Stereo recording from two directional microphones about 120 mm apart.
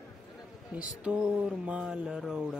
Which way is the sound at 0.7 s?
10° right (ahead or behind).